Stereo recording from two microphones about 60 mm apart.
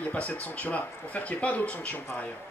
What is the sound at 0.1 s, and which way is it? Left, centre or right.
Speech, left.